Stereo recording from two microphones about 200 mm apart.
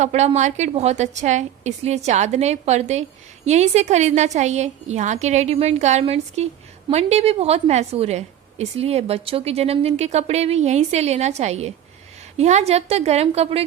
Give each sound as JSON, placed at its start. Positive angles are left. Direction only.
{"t": 0.0, "sound": "a woman's voice", "side_deg": -35}